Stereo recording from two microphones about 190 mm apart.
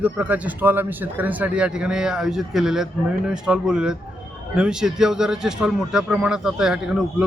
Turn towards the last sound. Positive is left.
turn(degrees=-5)  # may be behind; listen again after turning